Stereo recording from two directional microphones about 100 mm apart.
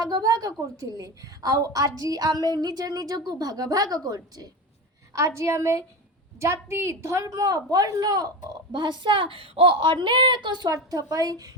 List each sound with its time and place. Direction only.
0.0 s a woman's voice: 40° right (ahead or behind)
5.1 s a woman's voice: 30° right (ahead or behind); by 10.8 s 45° right (ahead or behind)
10.9 s a woman's voice: 35° right (ahead or behind)